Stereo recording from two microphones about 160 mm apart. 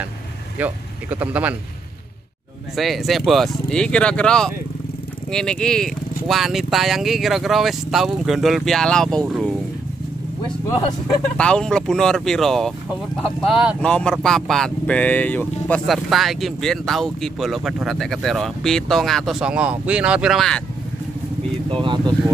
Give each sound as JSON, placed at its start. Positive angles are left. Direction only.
{"t": 0.6, "sound": "speech", "side_deg": -10}
{"t": 2.7, "sound": "speech", "side_deg": 0}
{"t": 10.4, "sound": "speech", "side_deg": 30}
{"t": 11.3, "sound": "speech", "side_deg": 5}
{"t": 15.9, "sound": "speech", "side_deg": 0}
{"t": 21.6, "sound": "speech", "side_deg": -30}